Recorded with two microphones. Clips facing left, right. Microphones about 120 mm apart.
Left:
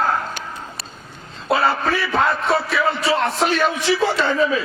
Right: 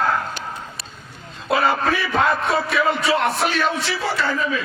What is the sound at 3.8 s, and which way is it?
Speech, 20° left (ahead or behind).